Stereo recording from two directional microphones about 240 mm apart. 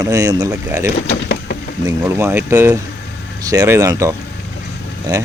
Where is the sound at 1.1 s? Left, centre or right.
Left.